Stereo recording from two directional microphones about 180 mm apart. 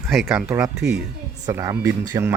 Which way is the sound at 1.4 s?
20° right (ahead or behind).